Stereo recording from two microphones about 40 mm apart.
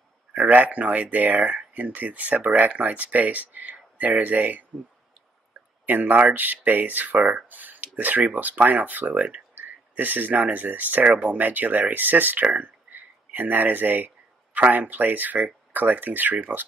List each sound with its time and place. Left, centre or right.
0.3 s speech: right
5.9 s speech: right